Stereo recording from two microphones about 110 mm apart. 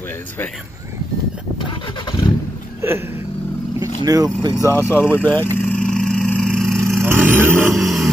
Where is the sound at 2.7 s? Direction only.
20° right (ahead or behind).